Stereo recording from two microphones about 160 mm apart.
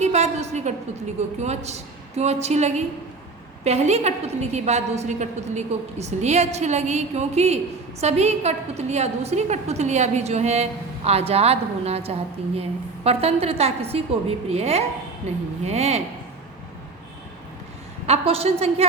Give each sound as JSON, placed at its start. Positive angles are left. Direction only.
{"t": 0.0, "sound": "a woman's voice", "side_deg": -45}
{"t": 18.0, "sound": "a woman's voice", "side_deg": -40}